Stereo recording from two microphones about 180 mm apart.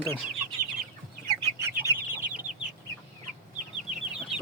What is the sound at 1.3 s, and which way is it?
Chicken, 15° right (ahead or behind).